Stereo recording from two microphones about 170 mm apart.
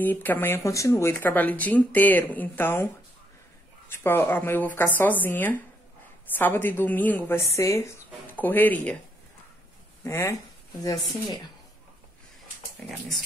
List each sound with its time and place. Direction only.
0.0 s speech: 10° left (ahead or behind)
3.9 s speech: 15° left (ahead or behind)
10.0 s speech: 15° left (ahead or behind)